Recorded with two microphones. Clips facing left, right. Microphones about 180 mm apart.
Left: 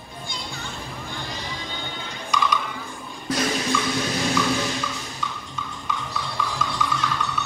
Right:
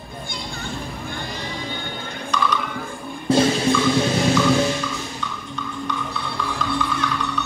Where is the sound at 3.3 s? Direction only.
30° right (ahead or behind).